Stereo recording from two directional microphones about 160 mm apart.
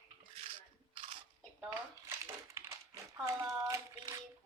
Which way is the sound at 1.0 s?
30° right (ahead or behind).